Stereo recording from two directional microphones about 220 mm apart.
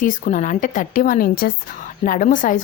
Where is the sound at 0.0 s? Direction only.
35° left (ahead or behind).